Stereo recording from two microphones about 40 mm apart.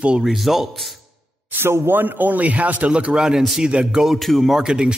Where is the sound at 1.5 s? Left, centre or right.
Right.